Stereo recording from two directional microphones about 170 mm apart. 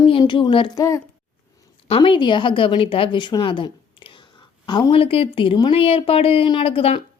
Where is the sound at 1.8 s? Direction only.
30° left (ahead or behind).